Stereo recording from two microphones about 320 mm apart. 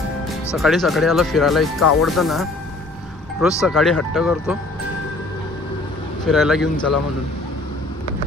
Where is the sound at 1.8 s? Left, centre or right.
Left.